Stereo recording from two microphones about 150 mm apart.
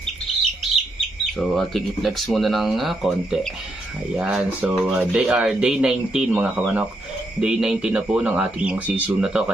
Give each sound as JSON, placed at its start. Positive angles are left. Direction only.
{"t": 1.5, "sound": "speech", "side_deg": 0}